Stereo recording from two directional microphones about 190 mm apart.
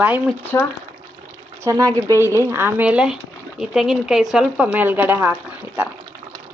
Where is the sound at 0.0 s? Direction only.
5° right (ahead or behind).